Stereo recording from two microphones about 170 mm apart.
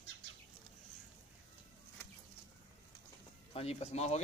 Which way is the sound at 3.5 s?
40° left (ahead or behind).